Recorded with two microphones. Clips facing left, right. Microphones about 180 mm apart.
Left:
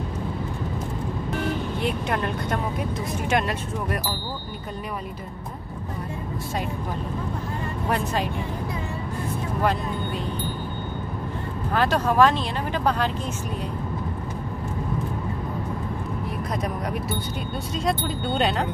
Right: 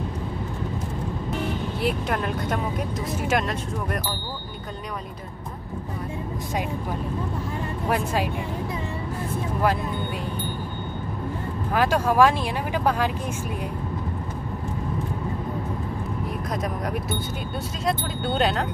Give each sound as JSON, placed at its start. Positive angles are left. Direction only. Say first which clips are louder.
{"t": 1.8, "sound": "speech", "louder": "right 3 dB", "side_deg": 0}
{"t": 7.9, "sound": "speech", "louder": "right 1 dB", "side_deg": -10}
{"t": 11.7, "sound": "speech", "louder": "right 1 dB", "side_deg": -10}
{"t": 17.8, "sound": "speech", "louder": "even", "side_deg": 0}